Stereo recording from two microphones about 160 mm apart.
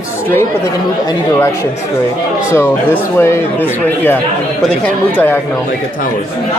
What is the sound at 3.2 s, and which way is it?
A woman's voice, 15° left (ahead or behind).